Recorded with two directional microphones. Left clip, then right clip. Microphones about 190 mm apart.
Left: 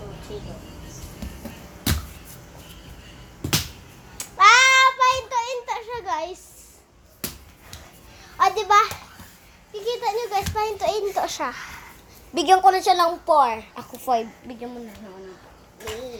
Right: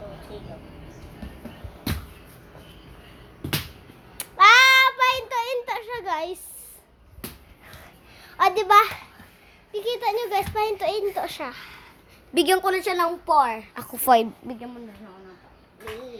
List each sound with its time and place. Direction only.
4.2 s child singing: 35° right (ahead or behind)
8.4 s a sound: 40° right (ahead or behind)
10.8 s a child's voice: 10° right (ahead or behind)
12.4 s a woman's voice: 35° right (ahead or behind)
13.7 s a woman's voice: 60° right (ahead or behind)